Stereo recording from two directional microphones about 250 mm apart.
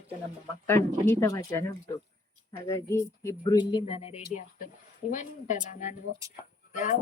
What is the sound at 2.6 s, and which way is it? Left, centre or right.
Speech, centre.